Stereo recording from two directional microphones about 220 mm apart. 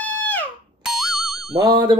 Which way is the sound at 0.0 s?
10° left (ahead or behind).